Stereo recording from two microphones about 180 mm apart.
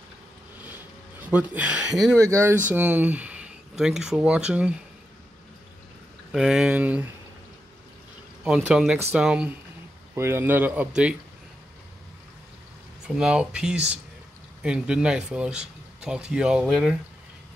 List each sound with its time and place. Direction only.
1.2 s speech: 10° right (ahead or behind)
2.1 s speech: 15° right (ahead or behind)
6.3 s speech: 5° right (ahead or behind)
8.5 s speech: 5° right (ahead or behind)
13.0 s speech: 5° right (ahead or behind)